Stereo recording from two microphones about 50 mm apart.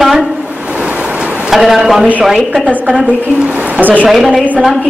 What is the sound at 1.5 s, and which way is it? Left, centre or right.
Speech, centre.